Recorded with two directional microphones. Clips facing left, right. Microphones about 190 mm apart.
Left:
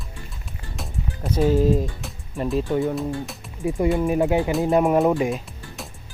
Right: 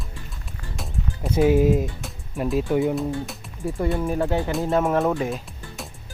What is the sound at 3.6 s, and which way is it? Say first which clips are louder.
Speech: left 4 dB; 15° left (ahead or behind).